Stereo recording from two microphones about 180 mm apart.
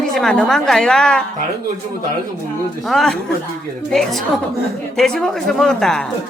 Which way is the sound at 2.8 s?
Centre (ahead or behind).